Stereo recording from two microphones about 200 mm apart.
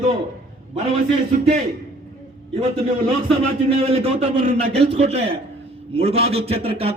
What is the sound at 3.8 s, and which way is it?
A man's voice, 30° right (ahead or behind).